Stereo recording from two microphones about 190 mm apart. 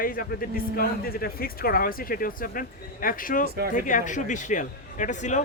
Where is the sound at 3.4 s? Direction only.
55° right (ahead or behind).